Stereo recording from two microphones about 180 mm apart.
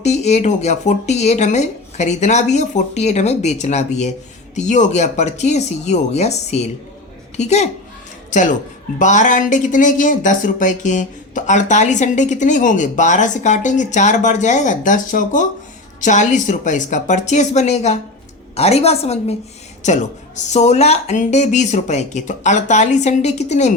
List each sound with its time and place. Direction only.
0.0 s speech: 40° left (ahead or behind)